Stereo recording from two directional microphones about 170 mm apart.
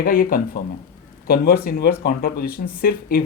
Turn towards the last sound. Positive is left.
turn(degrees=60)  # may be behind; listen again after turning